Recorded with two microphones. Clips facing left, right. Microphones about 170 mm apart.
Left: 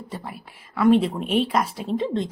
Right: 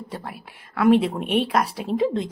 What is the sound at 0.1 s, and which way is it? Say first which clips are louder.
Speech: right 1 dB; centre (ahead or behind).